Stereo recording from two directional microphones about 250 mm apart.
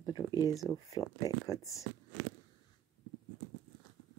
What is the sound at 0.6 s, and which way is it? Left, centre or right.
Speech, centre.